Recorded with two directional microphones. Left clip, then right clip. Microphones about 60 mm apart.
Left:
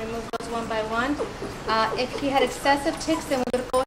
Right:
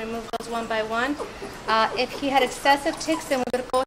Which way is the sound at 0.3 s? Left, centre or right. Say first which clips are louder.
Right 2 dB; right.